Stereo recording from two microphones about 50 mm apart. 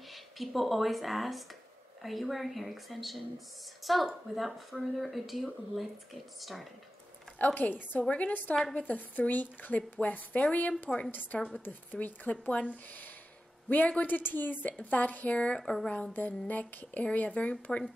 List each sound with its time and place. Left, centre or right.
0.1 s speech: centre
7.3 s a woman's voice: left
15.6 s a woman's voice: centre
16.1 s speech: left